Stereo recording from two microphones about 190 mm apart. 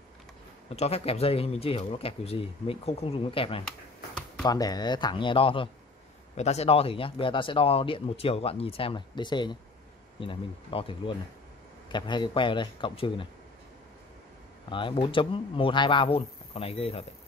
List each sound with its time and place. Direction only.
0.7 s speech: 35° left (ahead or behind)
14.7 s speech: 25° left (ahead or behind)